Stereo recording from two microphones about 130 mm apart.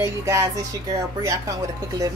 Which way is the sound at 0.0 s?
25° right (ahead or behind).